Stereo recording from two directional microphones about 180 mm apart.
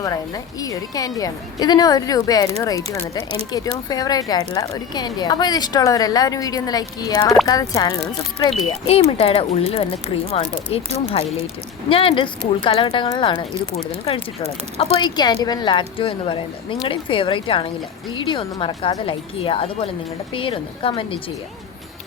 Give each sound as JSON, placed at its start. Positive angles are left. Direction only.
{"t": 0.0, "sound": "a woman's voice", "side_deg": 20}